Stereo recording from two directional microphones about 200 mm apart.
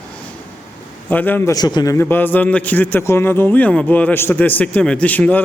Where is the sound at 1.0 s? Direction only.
10° left (ahead or behind).